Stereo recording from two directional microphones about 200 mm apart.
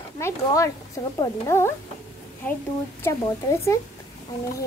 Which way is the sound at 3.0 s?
15° left (ahead or behind).